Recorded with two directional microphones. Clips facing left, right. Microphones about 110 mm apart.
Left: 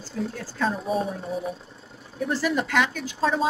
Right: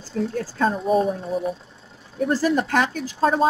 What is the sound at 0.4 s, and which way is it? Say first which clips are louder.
Speech: right 5 dB; 50° right (ahead or behind).